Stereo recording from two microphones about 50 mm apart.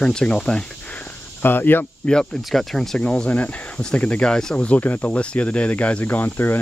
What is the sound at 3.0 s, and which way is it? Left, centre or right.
Speech, left.